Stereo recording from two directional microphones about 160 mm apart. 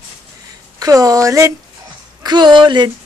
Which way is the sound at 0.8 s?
20° right (ahead or behind).